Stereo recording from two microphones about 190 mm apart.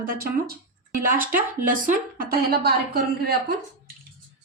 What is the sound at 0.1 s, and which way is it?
A woman's voice, 55° right (ahead or behind).